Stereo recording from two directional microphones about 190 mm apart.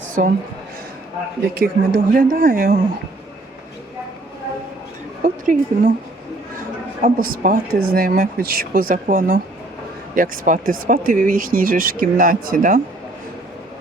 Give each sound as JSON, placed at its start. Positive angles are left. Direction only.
{"t": 1.5, "sound": "speech", "side_deg": -50}
{"t": 5.2, "sound": "speech", "side_deg": -45}
{"t": 7.0, "sound": "speech", "side_deg": -45}